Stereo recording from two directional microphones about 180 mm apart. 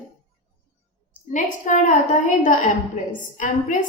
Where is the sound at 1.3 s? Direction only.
45° left (ahead or behind).